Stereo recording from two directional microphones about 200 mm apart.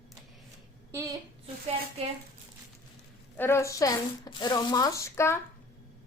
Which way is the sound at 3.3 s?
10° left (ahead or behind).